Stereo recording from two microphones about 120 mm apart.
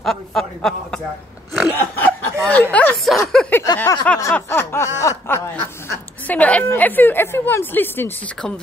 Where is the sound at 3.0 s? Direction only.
Centre (ahead or behind).